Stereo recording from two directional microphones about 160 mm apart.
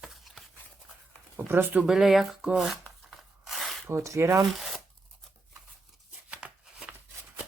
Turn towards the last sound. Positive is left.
turn(degrees=-5)  # may be behind; listen again after turning